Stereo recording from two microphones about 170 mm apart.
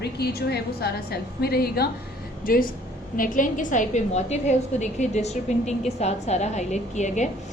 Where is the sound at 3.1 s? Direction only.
50° left (ahead or behind).